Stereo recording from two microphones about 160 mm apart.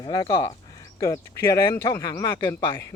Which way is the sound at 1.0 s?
20° left (ahead or behind).